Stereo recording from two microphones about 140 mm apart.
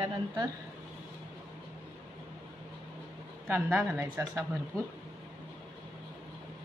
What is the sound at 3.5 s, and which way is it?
Speech, 15° right (ahead or behind).